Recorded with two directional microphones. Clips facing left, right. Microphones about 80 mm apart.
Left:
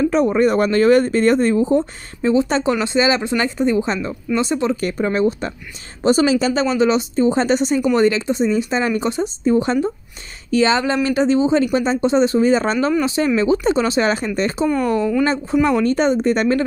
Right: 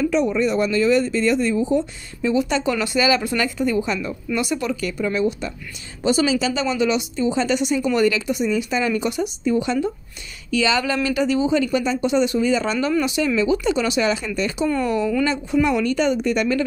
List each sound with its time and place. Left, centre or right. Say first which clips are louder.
0.0 s speech: left 4 dB; left
4.7 s speech: left 4 dB; left
10.8 s speech: left 3 dB; left